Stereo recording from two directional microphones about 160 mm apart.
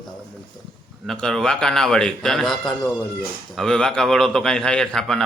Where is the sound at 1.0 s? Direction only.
5° left (ahead or behind).